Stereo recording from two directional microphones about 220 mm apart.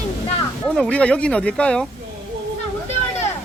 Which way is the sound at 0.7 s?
5° left (ahead or behind).